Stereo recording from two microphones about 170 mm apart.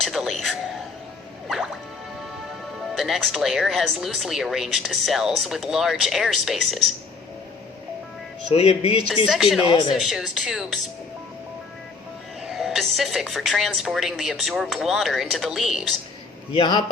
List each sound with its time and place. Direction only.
0.0 s whispering: centre (ahead or behind)
1.5 s music: centre (ahead or behind)
2.5 s speech: centre (ahead or behind)
8.5 s speech: 35° left (ahead or behind)
9.2 s speech: centre (ahead or behind)
12.5 s speech: centre (ahead or behind)
16.5 s speech: 30° left (ahead or behind)